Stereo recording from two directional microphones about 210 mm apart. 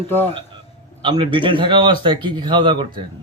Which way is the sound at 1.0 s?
25° right (ahead or behind).